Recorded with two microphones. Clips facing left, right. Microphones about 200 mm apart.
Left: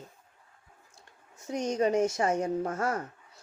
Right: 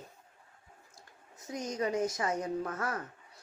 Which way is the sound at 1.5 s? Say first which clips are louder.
Left 7 dB; 70° left (ahead or behind).